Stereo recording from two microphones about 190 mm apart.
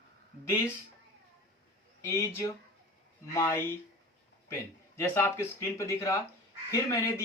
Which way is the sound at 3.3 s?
15° left (ahead or behind).